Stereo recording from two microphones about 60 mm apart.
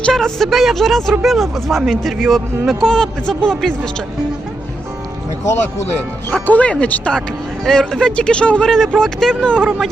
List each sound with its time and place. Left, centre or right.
0.1 s a man's voice: centre
6.4 s speech: left
7.7 s speech: centre